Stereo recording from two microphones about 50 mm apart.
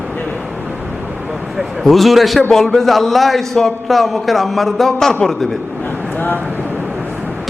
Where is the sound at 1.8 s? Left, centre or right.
Centre.